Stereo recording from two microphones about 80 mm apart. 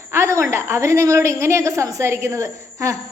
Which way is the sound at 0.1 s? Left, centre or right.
Right.